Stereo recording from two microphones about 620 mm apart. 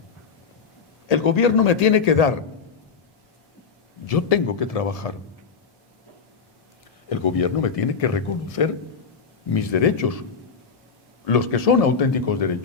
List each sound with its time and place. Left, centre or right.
1.0 s a man's voice: left
4.0 s speech: left
7.1 s speech: left
11.3 s speech: left